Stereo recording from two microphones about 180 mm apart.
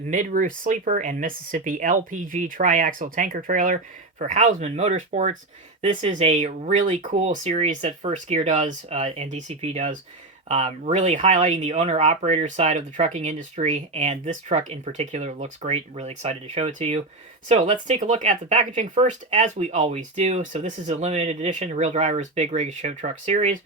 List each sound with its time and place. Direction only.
0.1 s speech: 45° right (ahead or behind)